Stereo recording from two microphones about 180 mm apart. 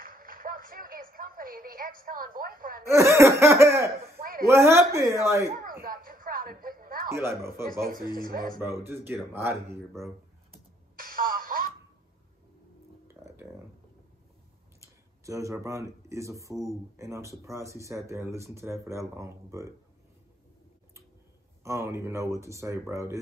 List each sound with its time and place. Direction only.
0.0 s a sound: 50° right (ahead or behind)
2.9 s speech: 15° right (ahead or behind)
4.2 s a sound: 55° right (ahead or behind)
4.5 s speech: 15° right (ahead or behind)
5.6 s a sound: 55° right (ahead or behind)
7.1 s speech: 15° right (ahead or behind)
7.8 s speech: 55° right (ahead or behind)
8.5 s speech: 15° right (ahead or behind)
11.0 s music: 50° right (ahead or behind)
13.1 s music: 15° right (ahead or behind)
14.8 s speech: 15° right (ahead or behind)
21.6 s speech: 15° right (ahead or behind)